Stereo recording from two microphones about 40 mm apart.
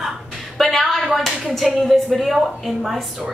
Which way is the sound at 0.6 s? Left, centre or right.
Centre.